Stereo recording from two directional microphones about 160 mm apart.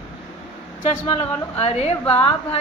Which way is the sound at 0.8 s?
35° left (ahead or behind).